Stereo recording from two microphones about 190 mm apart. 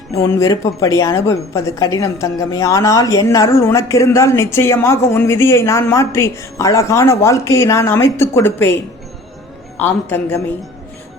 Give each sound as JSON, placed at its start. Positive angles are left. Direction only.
{"t": 0.1, "sound": "a woman's voice", "side_deg": 15}